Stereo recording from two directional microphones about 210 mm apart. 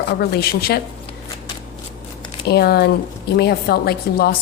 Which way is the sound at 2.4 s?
50° left (ahead or behind).